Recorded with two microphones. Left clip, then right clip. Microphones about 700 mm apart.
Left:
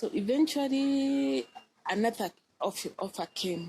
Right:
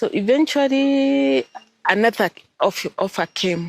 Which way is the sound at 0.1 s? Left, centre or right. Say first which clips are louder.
Right 11 dB; right.